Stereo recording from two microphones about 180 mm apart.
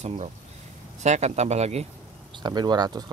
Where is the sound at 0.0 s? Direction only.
40° right (ahead or behind).